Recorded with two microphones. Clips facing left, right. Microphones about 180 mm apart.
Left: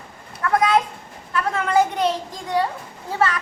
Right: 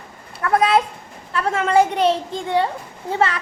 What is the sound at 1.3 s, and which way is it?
A child's voice, 25° right (ahead or behind).